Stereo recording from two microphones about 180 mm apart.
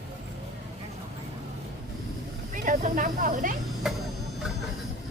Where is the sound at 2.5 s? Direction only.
45° right (ahead or behind).